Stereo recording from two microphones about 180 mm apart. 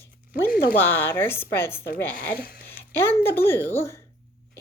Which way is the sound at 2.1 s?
60° left (ahead or behind).